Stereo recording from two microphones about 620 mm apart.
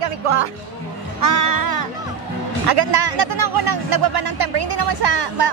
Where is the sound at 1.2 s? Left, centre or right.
Right.